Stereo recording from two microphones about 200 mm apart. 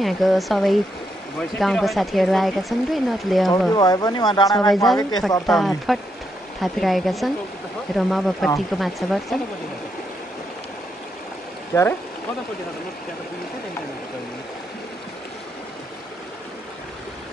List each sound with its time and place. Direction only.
0.0 s speech: centre (ahead or behind)
3.7 s speech: 20° left (ahead or behind)
5.5 s speech: centre (ahead or behind)
11.7 s speech: 10° left (ahead or behind)